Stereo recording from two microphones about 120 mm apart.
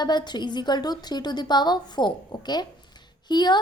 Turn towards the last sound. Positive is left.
turn(degrees=35)  # may be behind; listen again after turning